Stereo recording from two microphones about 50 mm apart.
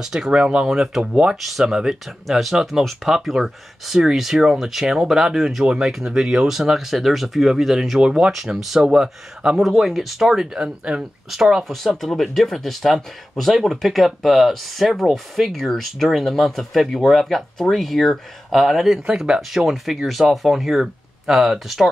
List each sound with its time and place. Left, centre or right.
0.0 s speech: centre
0.3 s speech: right
0.7 s speech: centre
9.6 s speech: centre
12.1 s speech: centre
19.0 s speech: centre
19.5 s speech: centre